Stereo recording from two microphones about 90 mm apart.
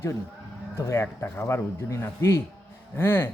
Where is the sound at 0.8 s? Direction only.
30° left (ahead or behind).